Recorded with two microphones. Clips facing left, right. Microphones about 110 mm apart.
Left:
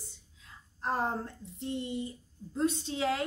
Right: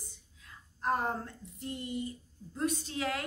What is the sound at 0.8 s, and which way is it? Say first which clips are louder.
A woman's voice: even; 30° left (ahead or behind).